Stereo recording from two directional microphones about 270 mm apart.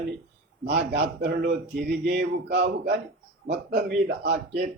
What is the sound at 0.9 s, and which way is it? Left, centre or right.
A man's voice, right.